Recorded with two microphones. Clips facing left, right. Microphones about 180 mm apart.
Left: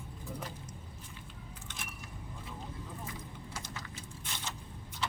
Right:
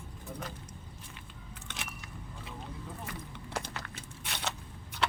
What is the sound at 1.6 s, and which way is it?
Biting, 75° right (ahead or behind).